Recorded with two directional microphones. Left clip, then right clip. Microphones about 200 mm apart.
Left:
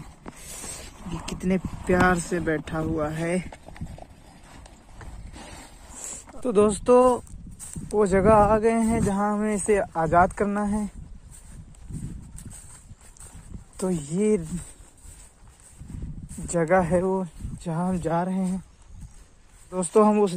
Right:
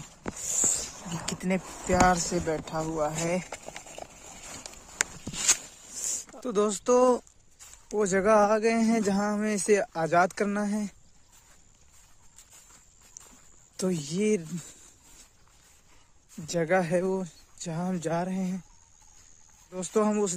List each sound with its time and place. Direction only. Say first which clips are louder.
1.4 s speech: left 4 dB; centre (ahead or behind)
5.9 s a sound: right 5 dB; 20° right (ahead or behind)
6.4 s speech: left 6 dB; centre (ahead or behind)
7.5 s a sound: left 6 dB; 55° left (ahead or behind)
8.0 s speech: left 4 dB; 15° right (ahead or behind); by 10.9 s 35° right (ahead or behind)
13.7 s speech: left 3 dB; 35° right (ahead or behind)
16.4 s speech: left 4 dB; 25° right (ahead or behind)
17.1 s speech: left 4 dB; 15° right (ahead or behind)
19.7 s speech: left 7 dB; centre (ahead or behind)